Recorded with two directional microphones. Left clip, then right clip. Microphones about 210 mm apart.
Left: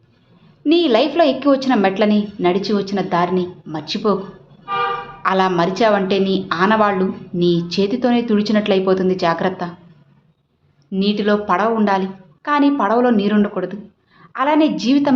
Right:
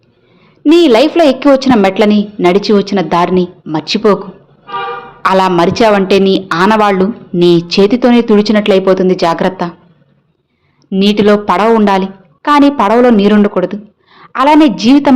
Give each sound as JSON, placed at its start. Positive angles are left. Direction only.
{"t": 0.6, "sound": "a woman's voice", "side_deg": -25}
{"t": 5.2, "sound": "a woman's voice", "side_deg": -30}
{"t": 10.8, "sound": "a woman's voice", "side_deg": -35}